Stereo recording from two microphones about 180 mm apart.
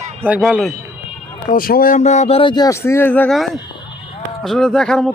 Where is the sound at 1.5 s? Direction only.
50° left (ahead or behind).